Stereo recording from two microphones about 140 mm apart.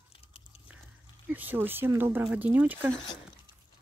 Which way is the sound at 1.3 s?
15° right (ahead or behind).